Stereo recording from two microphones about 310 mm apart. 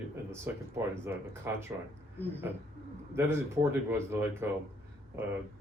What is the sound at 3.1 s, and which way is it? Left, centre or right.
A man's voice, centre.